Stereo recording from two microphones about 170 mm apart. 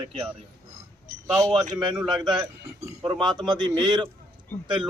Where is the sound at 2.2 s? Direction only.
25° right (ahead or behind).